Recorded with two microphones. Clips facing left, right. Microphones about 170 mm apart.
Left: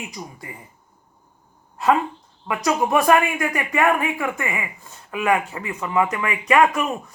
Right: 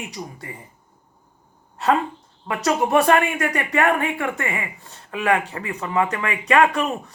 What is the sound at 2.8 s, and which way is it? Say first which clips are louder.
Speech: even; 30° right (ahead or behind).